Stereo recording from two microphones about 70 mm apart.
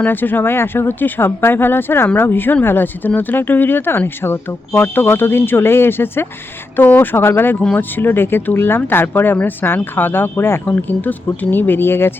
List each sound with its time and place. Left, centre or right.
0.0 s speech: left
10.7 s speech: left